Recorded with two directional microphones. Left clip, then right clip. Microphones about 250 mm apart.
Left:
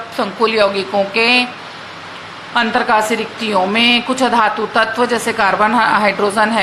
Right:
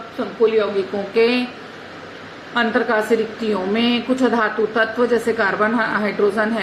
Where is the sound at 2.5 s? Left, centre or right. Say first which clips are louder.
Left 5 dB; centre.